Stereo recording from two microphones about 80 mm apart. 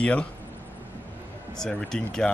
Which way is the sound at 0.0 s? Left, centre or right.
Centre.